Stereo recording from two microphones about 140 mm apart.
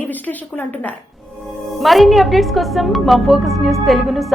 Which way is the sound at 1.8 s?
Centre (ahead or behind).